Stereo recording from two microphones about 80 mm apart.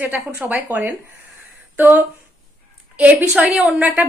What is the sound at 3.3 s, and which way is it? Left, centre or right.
Speech, centre.